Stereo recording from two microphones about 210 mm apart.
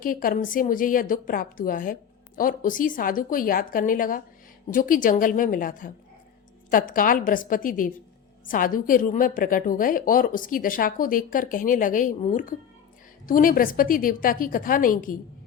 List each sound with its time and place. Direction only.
0.0 s a woman's voice: 40° left (ahead or behind)